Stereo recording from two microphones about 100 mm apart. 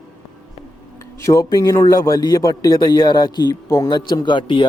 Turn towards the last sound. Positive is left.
turn(degrees=55)  # may be behind; listen again after turning